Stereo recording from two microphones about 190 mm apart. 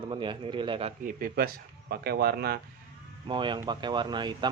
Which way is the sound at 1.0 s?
50° right (ahead or behind).